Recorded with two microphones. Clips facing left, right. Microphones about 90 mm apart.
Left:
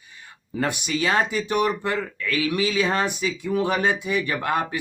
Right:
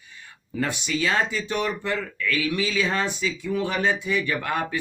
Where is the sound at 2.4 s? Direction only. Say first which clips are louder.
Left 4 dB; 45° left (ahead or behind).